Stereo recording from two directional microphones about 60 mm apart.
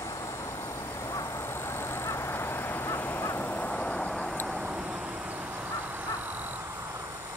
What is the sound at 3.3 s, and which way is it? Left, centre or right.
Vehicle, left.